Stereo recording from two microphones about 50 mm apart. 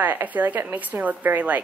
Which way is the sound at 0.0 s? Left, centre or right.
Right.